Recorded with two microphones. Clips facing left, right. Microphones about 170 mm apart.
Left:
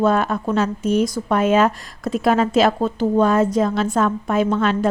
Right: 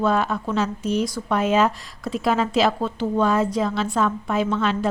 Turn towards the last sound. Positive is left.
turn(degrees=50)  # may be behind; listen again after turning